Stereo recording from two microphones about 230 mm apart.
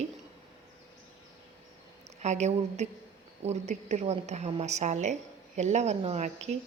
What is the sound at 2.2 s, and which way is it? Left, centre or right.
A woman's voice, right.